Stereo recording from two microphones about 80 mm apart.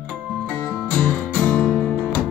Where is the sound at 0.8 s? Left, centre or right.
Centre.